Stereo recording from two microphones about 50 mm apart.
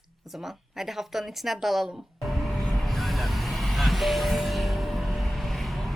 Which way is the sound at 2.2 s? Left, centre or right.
Centre.